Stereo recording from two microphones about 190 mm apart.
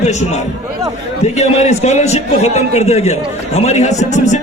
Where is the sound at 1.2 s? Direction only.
35° left (ahead or behind).